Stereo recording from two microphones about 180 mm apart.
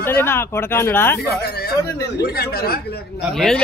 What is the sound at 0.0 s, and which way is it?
Speech, 10° left (ahead or behind).